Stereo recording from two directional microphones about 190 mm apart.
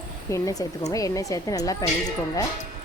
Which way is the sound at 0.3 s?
15° left (ahead or behind).